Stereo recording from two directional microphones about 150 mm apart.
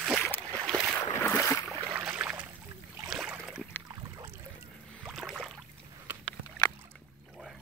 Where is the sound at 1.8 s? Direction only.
15° right (ahead or behind).